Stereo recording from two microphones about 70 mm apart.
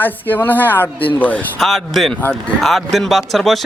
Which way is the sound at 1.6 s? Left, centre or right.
Centre.